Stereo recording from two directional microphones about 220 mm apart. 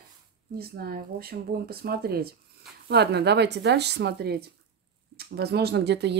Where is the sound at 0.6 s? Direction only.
45° right (ahead or behind).